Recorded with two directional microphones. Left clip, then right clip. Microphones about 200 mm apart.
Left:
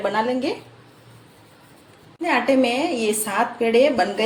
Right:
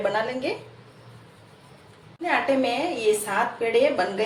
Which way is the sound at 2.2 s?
60° left (ahead or behind).